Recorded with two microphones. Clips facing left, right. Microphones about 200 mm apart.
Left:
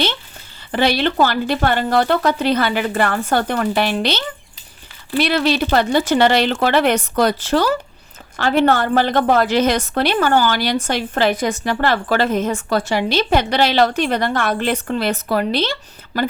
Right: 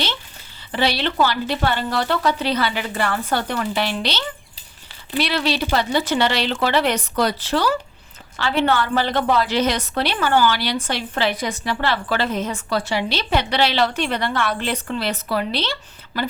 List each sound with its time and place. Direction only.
0.7 s a woman's voice: 50° left (ahead or behind)
5.2 s a woman's voice: 50° left (ahead or behind)